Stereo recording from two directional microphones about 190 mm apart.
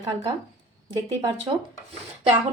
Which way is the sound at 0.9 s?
25° right (ahead or behind).